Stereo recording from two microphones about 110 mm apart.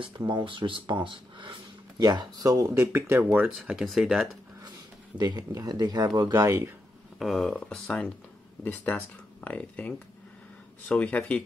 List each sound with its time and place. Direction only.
0.3 s speech: 45° right (ahead or behind)
2.7 s speech: 20° right (ahead or behind)
3.5 s speech: 5° right (ahead or behind)
4.6 s speech: 40° right (ahead or behind)
6.4 s speech: 25° right (ahead or behind)
7.2 s speech: centre (ahead or behind)
9.4 s speech: 15° left (ahead or behind)